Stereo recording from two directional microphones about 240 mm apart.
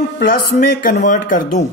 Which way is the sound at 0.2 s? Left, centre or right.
Left.